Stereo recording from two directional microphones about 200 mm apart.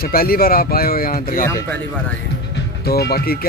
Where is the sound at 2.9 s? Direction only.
50° left (ahead or behind).